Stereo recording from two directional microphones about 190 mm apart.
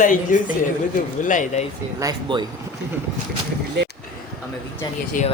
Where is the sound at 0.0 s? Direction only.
45° left (ahead or behind).